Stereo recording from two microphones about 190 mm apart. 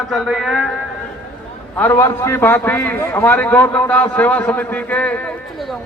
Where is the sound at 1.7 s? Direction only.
10° left (ahead or behind).